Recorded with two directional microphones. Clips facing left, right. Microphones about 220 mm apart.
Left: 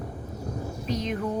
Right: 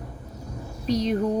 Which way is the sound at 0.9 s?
35° right (ahead or behind).